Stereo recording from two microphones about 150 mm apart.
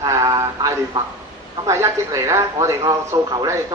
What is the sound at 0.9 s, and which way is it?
Speech, 30° right (ahead or behind).